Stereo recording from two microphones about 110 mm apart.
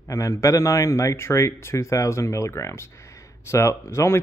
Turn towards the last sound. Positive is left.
turn(degrees=25)  # may be behind; listen again after turning